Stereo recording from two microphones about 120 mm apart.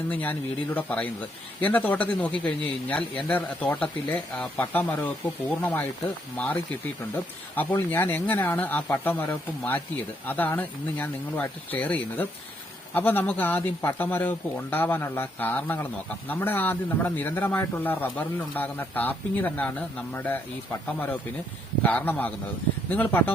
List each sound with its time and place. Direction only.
0.1 s a man's voice: 15° left (ahead or behind)
21.8 s a man's voice: 15° left (ahead or behind)